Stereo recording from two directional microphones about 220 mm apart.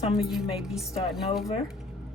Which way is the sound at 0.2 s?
Centre (ahead or behind).